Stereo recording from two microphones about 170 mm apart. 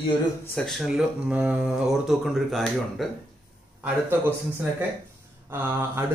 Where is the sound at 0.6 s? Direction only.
Centre (ahead or behind).